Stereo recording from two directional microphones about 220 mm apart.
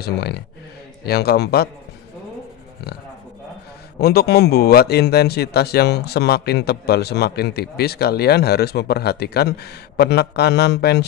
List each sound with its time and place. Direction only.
0.0 s speech: 45° left (ahead or behind)
4.0 s speech: 45° left (ahead or behind)